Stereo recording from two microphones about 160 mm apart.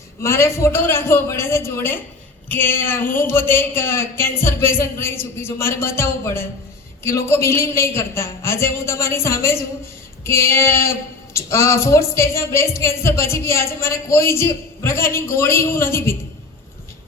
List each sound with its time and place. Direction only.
0.2 s a woman's voice: 15° left (ahead or behind)